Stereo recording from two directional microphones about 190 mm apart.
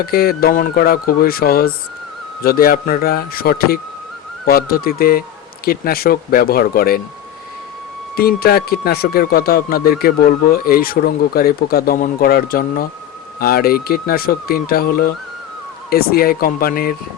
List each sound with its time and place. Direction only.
0.0 s speech: 55° left (ahead or behind)
8.1 s speech: 55° left (ahead or behind)